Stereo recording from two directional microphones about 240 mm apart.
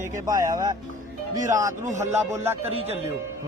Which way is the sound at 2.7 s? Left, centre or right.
Right.